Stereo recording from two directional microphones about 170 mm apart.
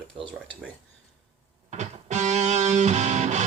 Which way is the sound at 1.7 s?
40° right (ahead or behind).